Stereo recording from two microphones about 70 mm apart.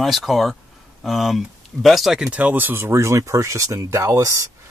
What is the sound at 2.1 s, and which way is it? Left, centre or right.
Speech, centre.